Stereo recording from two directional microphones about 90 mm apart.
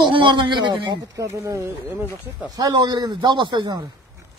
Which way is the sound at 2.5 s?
45° right (ahead or behind).